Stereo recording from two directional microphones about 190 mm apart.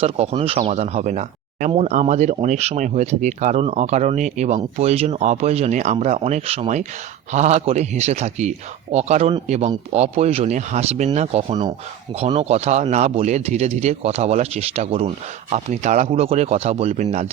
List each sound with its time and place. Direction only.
0.0 s speech: 30° right (ahead or behind)